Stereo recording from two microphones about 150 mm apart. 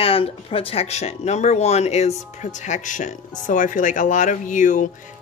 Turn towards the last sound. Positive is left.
turn(degrees=55)  # may be behind; listen again after turning